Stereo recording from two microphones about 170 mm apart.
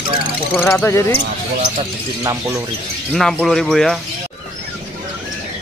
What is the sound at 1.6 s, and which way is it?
Speech, 25° right (ahead or behind).